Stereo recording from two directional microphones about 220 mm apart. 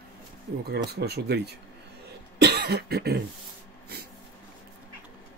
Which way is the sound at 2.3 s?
50° right (ahead or behind).